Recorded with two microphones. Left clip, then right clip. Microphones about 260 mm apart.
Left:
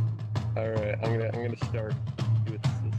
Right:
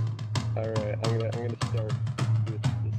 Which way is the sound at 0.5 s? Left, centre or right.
Left.